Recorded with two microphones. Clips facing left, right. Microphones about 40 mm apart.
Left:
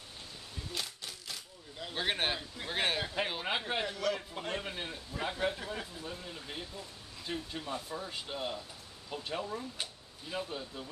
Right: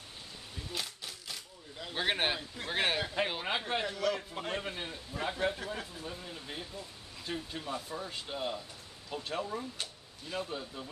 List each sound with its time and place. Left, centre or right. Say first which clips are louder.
0.7 s speech: right 1 dB; centre
9.8 s a sound: even; centre
10.5 s speech: right 1 dB; centre